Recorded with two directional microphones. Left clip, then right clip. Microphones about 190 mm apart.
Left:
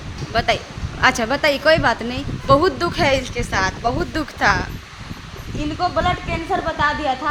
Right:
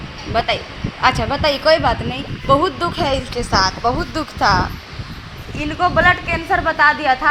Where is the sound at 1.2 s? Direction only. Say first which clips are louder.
Even; 20° left (ahead or behind).